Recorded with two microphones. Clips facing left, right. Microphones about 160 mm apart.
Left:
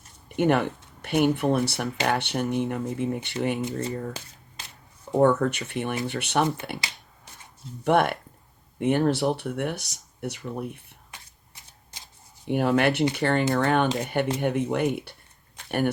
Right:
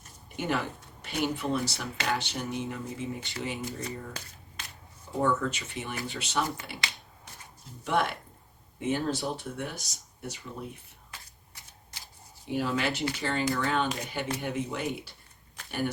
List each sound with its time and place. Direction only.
0.3 s speech: 65° left (ahead or behind)
5.1 s speech: 65° left (ahead or behind)
7.9 s speech: 60° left (ahead or behind)
11.1 s shuffling cards: 20° left (ahead or behind)
12.5 s speech: 60° left (ahead or behind)